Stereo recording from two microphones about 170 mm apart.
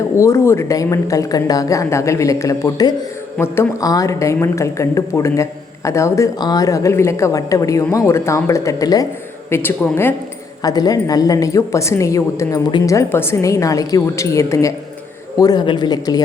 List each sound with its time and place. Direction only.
0.2 s a woman's voice: 15° left (ahead or behind)